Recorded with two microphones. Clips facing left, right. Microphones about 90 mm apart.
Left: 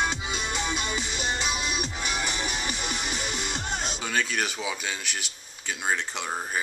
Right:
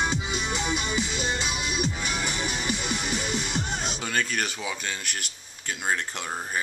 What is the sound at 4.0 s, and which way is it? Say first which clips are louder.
Speech: left 1 dB; centre (ahead or behind).